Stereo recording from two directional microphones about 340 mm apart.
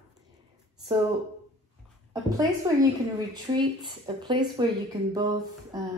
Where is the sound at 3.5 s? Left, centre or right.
Centre.